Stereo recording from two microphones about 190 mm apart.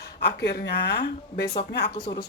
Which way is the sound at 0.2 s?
60° left (ahead or behind).